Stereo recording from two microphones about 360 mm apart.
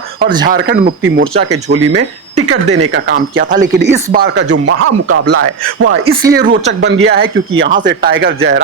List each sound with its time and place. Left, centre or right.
0.4 s speech: right
1.7 s speech: right
6.3 s speech: right